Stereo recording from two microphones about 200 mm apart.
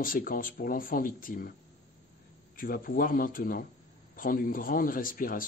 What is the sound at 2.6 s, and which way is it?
Speech, 45° left (ahead or behind).